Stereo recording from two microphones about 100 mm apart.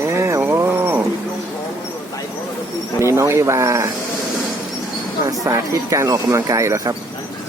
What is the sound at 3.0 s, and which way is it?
Speech, 30° right (ahead or behind).